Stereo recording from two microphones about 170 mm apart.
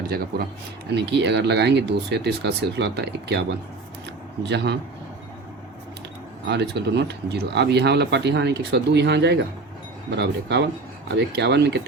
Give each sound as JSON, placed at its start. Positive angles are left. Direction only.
{"t": 0.9, "sound": "speech", "side_deg": -90}
{"t": 4.4, "sound": "speech", "side_deg": -90}
{"t": 6.5, "sound": "speech", "side_deg": -85}